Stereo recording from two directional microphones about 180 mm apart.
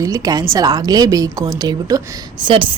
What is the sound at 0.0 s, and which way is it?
Speech, 20° right (ahead or behind).